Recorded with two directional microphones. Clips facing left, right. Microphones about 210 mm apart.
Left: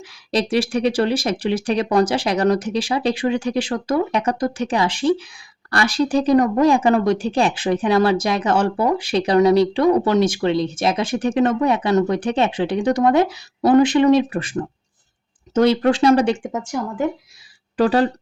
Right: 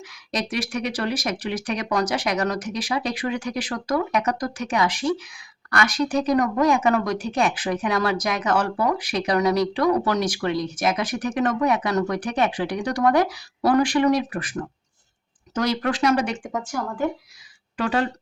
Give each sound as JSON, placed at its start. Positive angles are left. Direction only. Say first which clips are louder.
{"t": 0.0, "sound": "speech", "louder": "left 7 dB", "side_deg": 30}
{"t": 17.7, "sound": "speech", "louder": "left 7 dB", "side_deg": 35}